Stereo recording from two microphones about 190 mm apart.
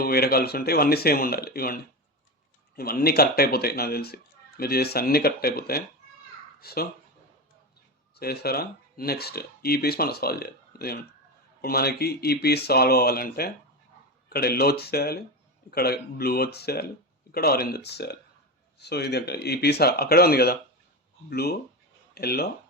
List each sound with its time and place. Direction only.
0.0 s speech: 55° left (ahead or behind)
8.1 s speech: 55° left (ahead or behind)